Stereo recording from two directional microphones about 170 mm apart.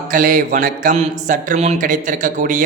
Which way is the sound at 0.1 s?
50° right (ahead or behind).